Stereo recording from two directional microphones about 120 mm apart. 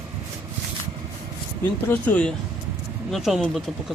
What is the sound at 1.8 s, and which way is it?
Speech, 10° left (ahead or behind).